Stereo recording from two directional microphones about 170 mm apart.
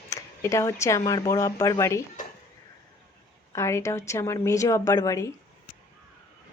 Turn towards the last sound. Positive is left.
turn(degrees=15)  # may be behind; listen again after turning